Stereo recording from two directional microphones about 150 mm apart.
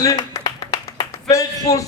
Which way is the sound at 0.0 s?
25° left (ahead or behind).